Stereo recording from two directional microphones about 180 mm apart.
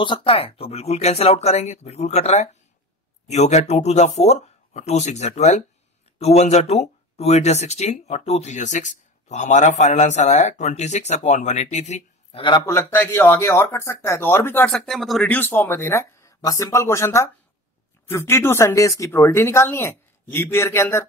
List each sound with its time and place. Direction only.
0.0 s speech: 30° left (ahead or behind)
12.6 s speech: 15° left (ahead or behind)
14.8 s speech: centre (ahead or behind)